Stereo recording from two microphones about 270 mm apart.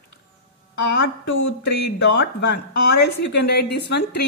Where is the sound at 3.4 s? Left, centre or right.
Left.